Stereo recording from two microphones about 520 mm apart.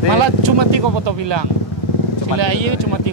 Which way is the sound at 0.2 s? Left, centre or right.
Right.